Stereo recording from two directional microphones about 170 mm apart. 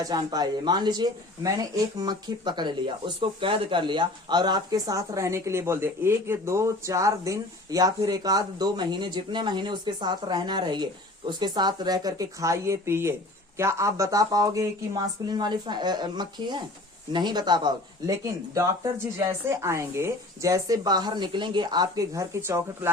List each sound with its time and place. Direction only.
0.0 s speech: 25° right (ahead or behind)